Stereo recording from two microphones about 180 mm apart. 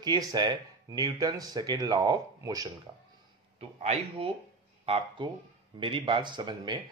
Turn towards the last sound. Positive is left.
turn(degrees=-25)  # may be behind; listen again after turning